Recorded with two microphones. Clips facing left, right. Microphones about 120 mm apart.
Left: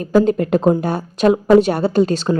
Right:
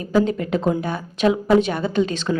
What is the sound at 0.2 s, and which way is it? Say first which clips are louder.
A woman's voice: left 5 dB; 45° left (ahead or behind).